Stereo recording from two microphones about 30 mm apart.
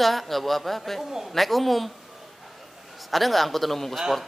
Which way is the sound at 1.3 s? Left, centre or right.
Centre.